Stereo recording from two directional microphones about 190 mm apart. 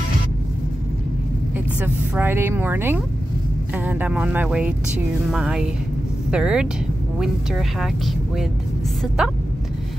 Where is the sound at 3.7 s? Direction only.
10° right (ahead or behind).